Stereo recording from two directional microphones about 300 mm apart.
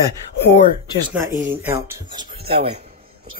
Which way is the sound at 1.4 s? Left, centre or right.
Centre.